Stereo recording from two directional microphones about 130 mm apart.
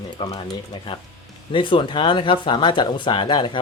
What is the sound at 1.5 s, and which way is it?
Speech, 40° left (ahead or behind).